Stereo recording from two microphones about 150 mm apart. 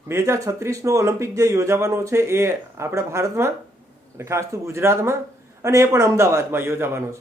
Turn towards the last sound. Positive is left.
turn(degrees=-15)  # may be behind; listen again after turning